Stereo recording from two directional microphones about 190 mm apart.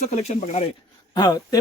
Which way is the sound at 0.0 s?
35° left (ahead or behind).